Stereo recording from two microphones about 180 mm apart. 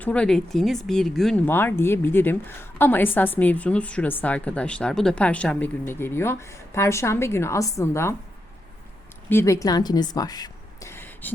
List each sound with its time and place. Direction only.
0.0 s speech: 5° left (ahead or behind)
1.5 s speech: 10° left (ahead or behind)
9.3 s speech: 15° left (ahead or behind)